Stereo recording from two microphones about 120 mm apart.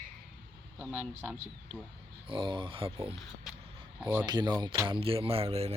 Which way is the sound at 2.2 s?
45° right (ahead or behind).